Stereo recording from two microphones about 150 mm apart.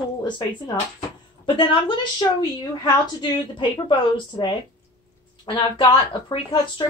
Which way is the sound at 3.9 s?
35° left (ahead or behind).